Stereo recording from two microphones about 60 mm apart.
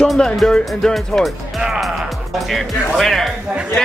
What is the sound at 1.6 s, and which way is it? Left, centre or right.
Speech, centre.